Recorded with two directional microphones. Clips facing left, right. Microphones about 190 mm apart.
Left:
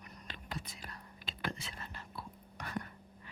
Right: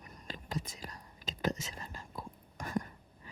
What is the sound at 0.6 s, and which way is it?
Whispering, 40° right (ahead or behind).